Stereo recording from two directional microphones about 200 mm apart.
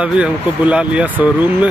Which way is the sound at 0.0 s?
5° right (ahead or behind).